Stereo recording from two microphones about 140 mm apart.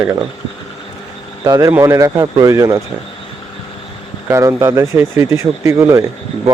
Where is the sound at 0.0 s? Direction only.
15° right (ahead or behind).